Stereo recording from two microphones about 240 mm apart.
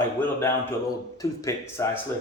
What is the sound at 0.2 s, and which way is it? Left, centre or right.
Speech, centre.